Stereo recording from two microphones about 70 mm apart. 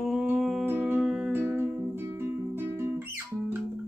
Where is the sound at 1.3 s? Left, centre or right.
Right.